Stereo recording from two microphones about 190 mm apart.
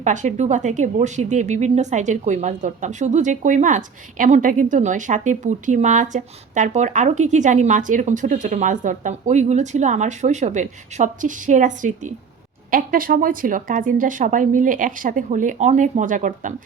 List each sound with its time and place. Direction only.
0.0 s a woman's voice: 40° right (ahead or behind)